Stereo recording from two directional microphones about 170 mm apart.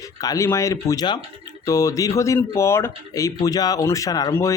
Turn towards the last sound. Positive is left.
turn(degrees=20)  # may be behind; listen again after turning